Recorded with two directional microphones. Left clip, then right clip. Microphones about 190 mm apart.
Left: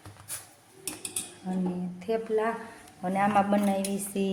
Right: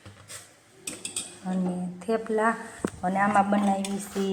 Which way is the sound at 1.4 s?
Centre (ahead or behind).